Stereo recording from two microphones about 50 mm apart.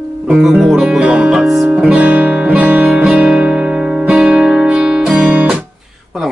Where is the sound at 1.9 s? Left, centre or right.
Right.